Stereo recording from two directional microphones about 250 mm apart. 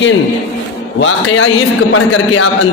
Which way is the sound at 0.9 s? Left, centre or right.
Left.